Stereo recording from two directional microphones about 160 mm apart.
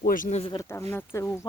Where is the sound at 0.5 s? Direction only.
15° left (ahead or behind).